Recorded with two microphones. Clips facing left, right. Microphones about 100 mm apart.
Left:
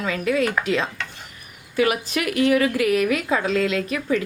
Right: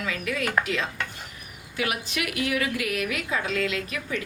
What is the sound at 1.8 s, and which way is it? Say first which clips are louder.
A woman's voice: left 8 dB; 40° left (ahead or behind).